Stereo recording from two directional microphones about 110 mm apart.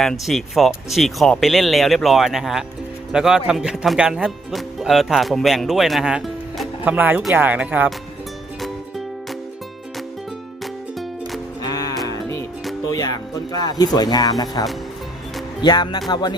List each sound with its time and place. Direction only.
0.0 s speech: centre (ahead or behind)
6.8 s speech: 15° right (ahead or behind)
12.0 s music: 25° left (ahead or behind)
12.9 s speech: 35° left (ahead or behind)
15.6 s speech: 40° left (ahead or behind)